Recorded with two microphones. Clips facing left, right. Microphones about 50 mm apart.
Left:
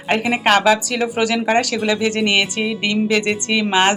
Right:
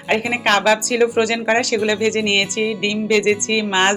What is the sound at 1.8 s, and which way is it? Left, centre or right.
Speech, centre.